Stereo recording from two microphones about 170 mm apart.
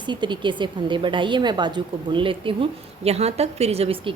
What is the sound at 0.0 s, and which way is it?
A woman's voice, 25° right (ahead or behind).